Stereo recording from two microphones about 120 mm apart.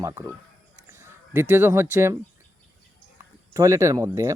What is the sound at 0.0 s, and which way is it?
Speech, 20° right (ahead or behind).